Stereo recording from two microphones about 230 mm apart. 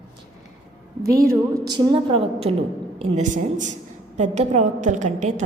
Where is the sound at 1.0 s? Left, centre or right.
Centre.